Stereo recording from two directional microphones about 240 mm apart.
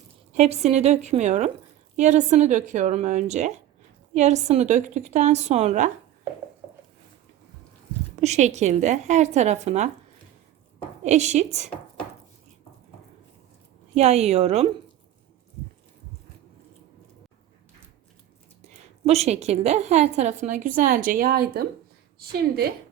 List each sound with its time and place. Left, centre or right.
0.3 s a woman's voice: right
8.2 s a woman's voice: right
11.0 s a woman's voice: right
13.9 s a woman's voice: right
18.7 s a woman's voice: right